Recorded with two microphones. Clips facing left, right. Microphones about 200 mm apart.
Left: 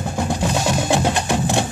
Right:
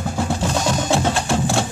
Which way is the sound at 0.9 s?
20° left (ahead or behind).